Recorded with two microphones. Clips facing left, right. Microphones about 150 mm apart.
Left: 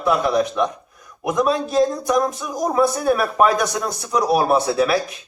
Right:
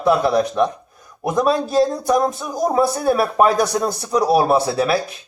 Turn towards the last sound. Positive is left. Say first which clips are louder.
# even
turn(degrees=-30)  # may be behind; listen again after turning